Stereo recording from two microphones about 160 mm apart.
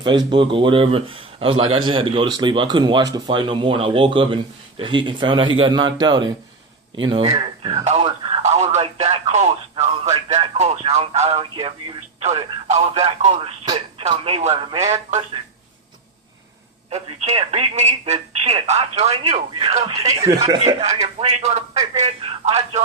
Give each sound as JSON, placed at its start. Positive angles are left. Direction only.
{"t": 0.0, "sound": "a man's voice", "side_deg": -30}
{"t": 12.2, "sound": "speech", "side_deg": -40}
{"t": 16.9, "sound": "speech", "side_deg": -45}
{"t": 20.1, "sound": "a man's voice", "side_deg": -20}
{"t": 21.0, "sound": "speech", "side_deg": -45}